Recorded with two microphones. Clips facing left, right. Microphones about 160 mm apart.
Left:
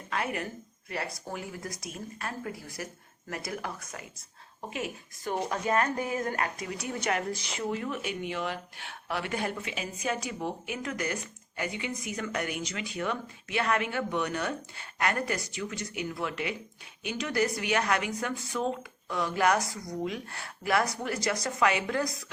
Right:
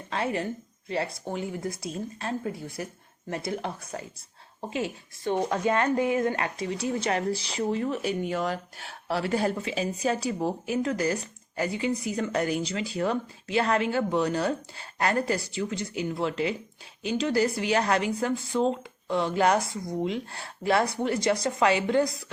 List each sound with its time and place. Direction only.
0.1 s a woman's voice: 30° right (ahead or behind)